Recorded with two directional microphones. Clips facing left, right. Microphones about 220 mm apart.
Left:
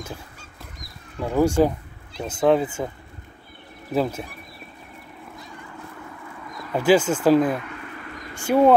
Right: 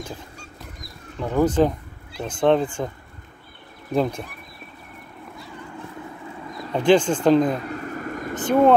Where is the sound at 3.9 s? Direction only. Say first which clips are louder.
Right 1 dB; 5° left (ahead or behind).